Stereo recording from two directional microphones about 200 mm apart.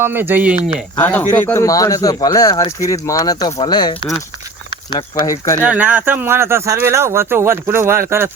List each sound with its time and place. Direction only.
0.0 s speech: 10° right (ahead or behind)
0.9 s speech: 10° left (ahead or behind)
5.6 s speech: 10° right (ahead or behind)